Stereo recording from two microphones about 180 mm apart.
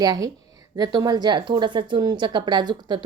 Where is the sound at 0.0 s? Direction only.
20° right (ahead or behind).